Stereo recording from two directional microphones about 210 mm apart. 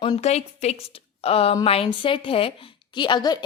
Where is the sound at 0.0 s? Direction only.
25° left (ahead or behind).